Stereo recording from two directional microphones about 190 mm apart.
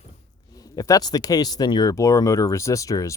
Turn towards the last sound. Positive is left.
turn(degrees=15)  # may be behind; listen again after turning